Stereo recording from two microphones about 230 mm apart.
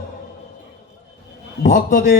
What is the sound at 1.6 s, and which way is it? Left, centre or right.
Speech, left.